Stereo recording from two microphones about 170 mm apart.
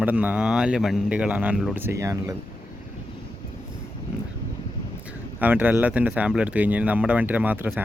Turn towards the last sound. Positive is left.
turn(degrees=-10)  # may be behind; listen again after turning